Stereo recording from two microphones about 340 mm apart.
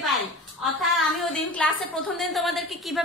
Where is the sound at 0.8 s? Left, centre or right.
Centre.